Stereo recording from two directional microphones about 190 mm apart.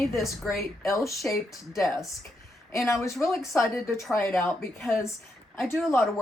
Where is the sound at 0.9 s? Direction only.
15° left (ahead or behind).